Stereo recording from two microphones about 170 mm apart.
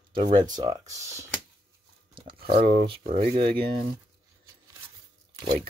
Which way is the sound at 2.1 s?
30° right (ahead or behind).